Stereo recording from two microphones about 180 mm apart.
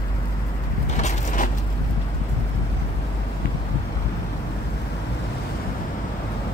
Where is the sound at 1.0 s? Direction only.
40° left (ahead or behind).